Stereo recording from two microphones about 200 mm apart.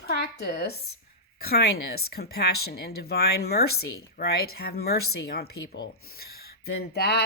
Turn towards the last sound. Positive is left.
turn(degrees=55)  # may be behind; listen again after turning